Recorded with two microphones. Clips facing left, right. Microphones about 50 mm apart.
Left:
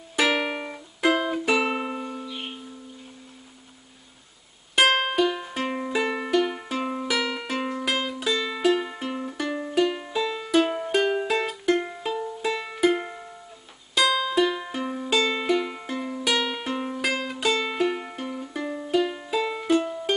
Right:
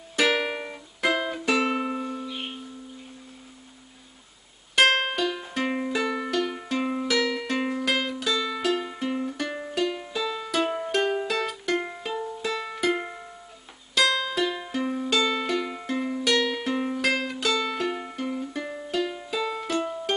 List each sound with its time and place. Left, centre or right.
0.1 s music: centre
4.7 s music: centre
6.0 s music: centre
6.8 s music: centre
7.1 s music: centre
9.8 s music: centre
12.4 s music: centre
15.2 s music: centre
16.0 s music: centre
16.3 s music: centre
18.2 s music: centre